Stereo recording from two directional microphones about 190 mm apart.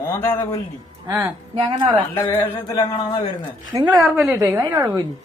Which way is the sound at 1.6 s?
25° right (ahead or behind).